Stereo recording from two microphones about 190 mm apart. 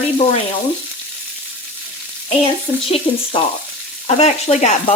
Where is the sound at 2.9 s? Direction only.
30° left (ahead or behind).